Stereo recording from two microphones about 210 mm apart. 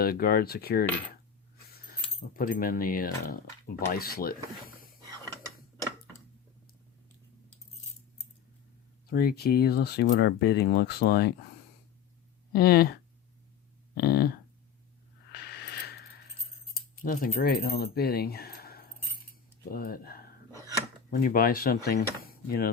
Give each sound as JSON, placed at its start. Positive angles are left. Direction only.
{"t": 0.0, "sound": "speech", "side_deg": 45}
{"t": 1.6, "sound": "a sound", "side_deg": 45}
{"t": 2.3, "sound": "speech", "side_deg": 40}
{"t": 9.0, "sound": "speech", "side_deg": 45}
{"t": 12.5, "sound": "speech", "side_deg": 50}
{"t": 13.9, "sound": "a sound", "side_deg": 45}
{"t": 17.0, "sound": "speech", "side_deg": 45}